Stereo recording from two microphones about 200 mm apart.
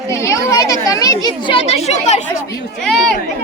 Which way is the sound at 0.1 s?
15° left (ahead or behind).